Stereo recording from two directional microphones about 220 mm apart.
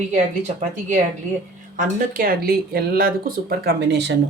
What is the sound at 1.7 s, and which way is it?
Speech, 40° right (ahead or behind).